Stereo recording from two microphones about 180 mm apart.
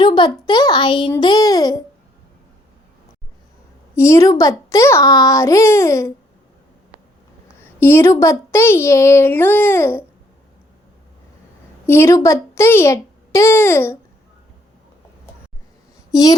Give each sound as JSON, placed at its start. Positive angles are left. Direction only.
{"t": 0.0, "sound": "a child's voice", "side_deg": 25}
{"t": 1.2, "sound": "child singing", "side_deg": 20}
{"t": 3.9, "sound": "a woman's voice", "side_deg": 15}
{"t": 7.6, "sound": "a woman's voice", "side_deg": 10}
{"t": 11.9, "sound": "a woman's voice", "side_deg": 15}